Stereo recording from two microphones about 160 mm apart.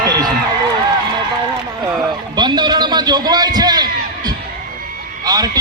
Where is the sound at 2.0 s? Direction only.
25° right (ahead or behind).